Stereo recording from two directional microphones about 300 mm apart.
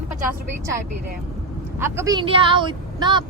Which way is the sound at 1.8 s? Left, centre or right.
Centre.